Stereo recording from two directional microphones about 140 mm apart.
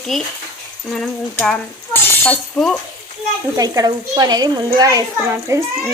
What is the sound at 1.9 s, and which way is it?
Chink, 10° left (ahead or behind).